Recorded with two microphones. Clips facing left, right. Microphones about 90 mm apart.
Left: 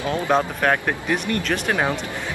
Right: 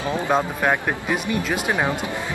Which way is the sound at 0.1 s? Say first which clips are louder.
Left 1 dB; 5° right (ahead or behind).